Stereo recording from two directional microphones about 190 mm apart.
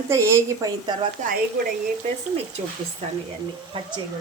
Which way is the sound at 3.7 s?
30° right (ahead or behind).